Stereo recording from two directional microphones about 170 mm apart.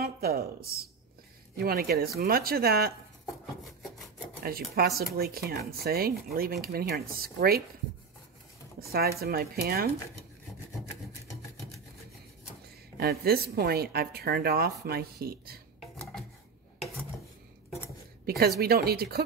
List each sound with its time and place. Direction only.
0.0 s a woman's voice: 65° right (ahead or behind)
4.4 s speech: 60° right (ahead or behind)
8.7 s speech: 65° right (ahead or behind)
12.9 s speech: 65° right (ahead or behind)
18.4 s speech: 65° right (ahead or behind)